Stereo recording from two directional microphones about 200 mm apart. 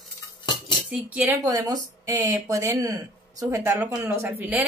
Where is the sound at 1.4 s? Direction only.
20° right (ahead or behind).